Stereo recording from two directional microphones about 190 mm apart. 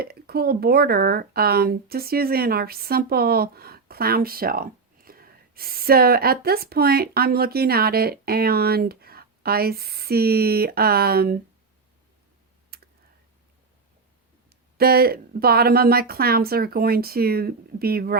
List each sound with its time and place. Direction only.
0.0 s speech: 55° right (ahead or behind)
12.7 s computer keyboard: 55° right (ahead or behind)
14.8 s speech: 55° right (ahead or behind)